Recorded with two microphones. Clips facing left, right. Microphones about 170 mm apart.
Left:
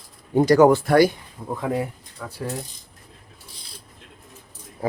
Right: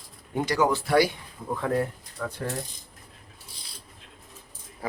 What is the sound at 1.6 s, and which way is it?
Speech, 10° left (ahead or behind).